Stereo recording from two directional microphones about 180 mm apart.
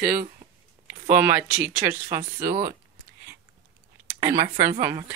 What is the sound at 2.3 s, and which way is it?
Speech, 55° right (ahead or behind).